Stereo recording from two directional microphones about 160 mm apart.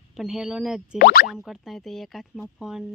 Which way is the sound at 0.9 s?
70° left (ahead or behind).